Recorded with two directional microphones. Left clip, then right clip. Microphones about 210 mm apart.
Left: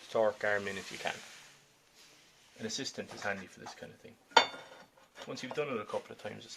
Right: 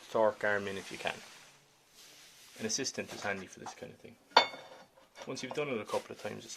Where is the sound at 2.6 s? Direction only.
30° right (ahead or behind).